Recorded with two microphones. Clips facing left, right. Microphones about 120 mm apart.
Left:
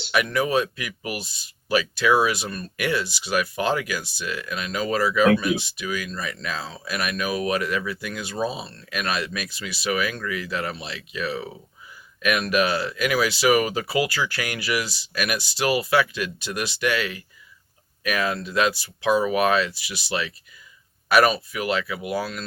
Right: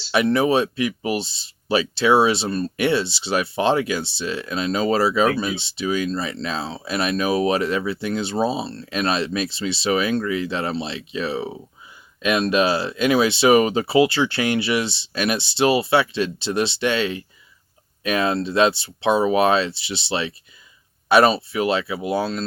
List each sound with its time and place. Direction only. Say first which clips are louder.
0.1 s speech: right 4 dB; 30° right (ahead or behind)